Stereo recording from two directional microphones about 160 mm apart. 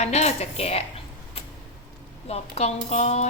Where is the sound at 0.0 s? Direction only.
45° left (ahead or behind).